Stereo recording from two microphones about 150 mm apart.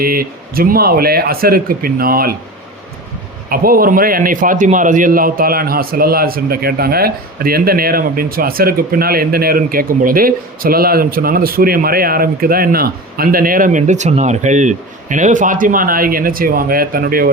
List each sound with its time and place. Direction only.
0.0 s speech: 80° right
3.5 s a man's voice: 75° right (ahead or behind)